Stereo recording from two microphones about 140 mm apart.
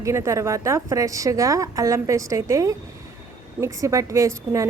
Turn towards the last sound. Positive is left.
turn(degrees=-20)  # may be behind; listen again after turning